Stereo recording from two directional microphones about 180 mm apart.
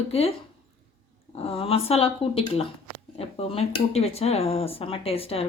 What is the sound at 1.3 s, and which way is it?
Speech, 35° left (ahead or behind).